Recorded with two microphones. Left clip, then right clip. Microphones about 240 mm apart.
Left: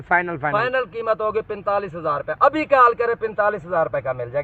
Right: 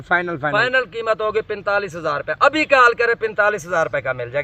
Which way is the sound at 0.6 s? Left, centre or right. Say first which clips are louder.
Right 4 dB; right.